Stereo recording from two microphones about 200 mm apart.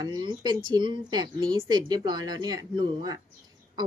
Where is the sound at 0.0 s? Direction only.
20° right (ahead or behind).